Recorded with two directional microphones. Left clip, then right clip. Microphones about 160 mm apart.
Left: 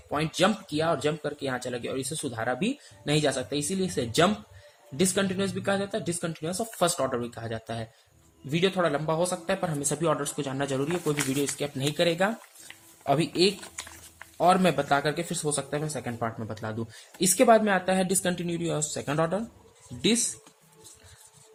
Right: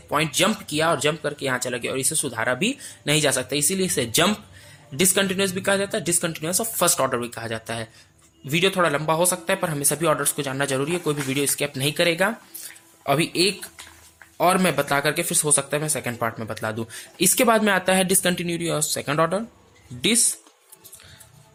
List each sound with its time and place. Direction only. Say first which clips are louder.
0.1 s speech: right 4 dB; 20° right (ahead or behind)